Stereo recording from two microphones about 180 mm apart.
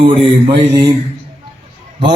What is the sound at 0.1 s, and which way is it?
Speech, 30° right (ahead or behind).